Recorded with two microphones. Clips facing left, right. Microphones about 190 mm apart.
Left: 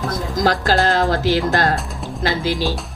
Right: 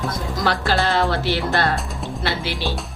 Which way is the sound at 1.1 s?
90° left.